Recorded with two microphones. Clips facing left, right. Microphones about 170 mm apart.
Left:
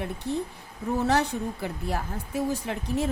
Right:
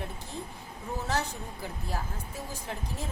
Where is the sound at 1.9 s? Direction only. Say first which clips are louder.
Left 6 dB; 70° left (ahead or behind).